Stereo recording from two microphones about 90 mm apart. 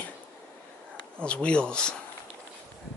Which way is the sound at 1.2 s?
10° left (ahead or behind).